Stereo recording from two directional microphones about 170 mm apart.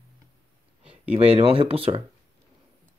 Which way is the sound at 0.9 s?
35° right (ahead or behind).